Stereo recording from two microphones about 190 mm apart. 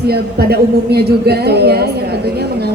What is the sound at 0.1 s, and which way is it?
Speech, 55° right (ahead or behind).